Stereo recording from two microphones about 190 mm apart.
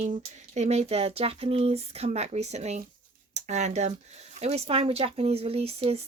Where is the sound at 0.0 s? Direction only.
40° right (ahead or behind).